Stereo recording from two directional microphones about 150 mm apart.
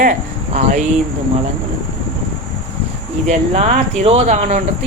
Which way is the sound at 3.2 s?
50° right (ahead or behind).